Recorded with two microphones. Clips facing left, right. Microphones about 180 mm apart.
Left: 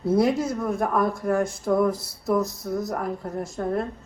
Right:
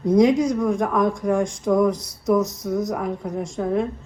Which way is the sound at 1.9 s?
20° right (ahead or behind).